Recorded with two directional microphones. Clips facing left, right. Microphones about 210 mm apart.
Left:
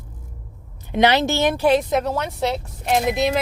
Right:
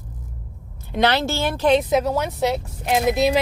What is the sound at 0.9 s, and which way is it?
Speech, 15° left (ahead or behind).